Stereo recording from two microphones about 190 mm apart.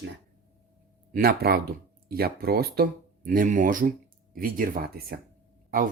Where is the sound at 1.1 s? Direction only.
50° right (ahead or behind).